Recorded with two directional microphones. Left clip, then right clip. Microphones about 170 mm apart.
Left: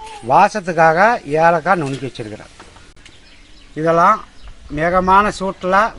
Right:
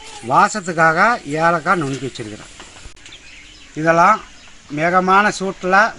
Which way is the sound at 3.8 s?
10° left (ahead or behind).